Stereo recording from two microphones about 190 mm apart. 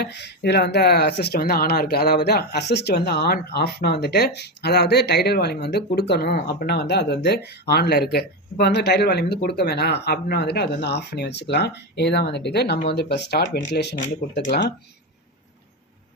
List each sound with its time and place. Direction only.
0.0 s speech: 65° left (ahead or behind)